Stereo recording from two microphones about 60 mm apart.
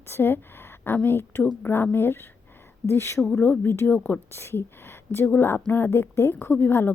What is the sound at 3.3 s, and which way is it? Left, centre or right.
Speech, left.